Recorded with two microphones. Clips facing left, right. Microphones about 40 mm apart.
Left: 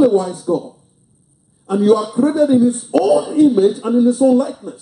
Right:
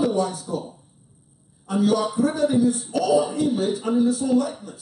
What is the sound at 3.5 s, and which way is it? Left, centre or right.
Speech, left.